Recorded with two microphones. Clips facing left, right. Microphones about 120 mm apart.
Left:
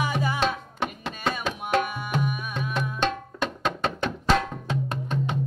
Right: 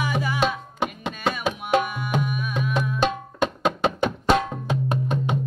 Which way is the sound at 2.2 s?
30° left (ahead or behind).